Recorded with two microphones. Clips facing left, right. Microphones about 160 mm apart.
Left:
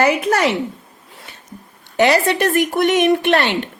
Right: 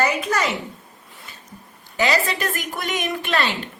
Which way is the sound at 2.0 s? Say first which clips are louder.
Left 7 dB; 60° left (ahead or behind).